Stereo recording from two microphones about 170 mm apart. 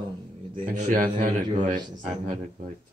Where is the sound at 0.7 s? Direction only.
50° right (ahead or behind).